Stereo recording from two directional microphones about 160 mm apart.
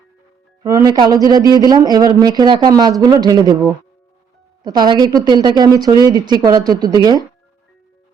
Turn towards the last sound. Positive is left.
turn(degrees=-25)  # may be behind; listen again after turning